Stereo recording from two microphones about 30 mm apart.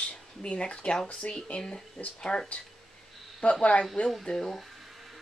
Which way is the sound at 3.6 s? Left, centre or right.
Left.